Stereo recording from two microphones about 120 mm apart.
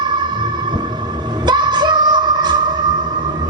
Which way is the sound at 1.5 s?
35° right (ahead or behind).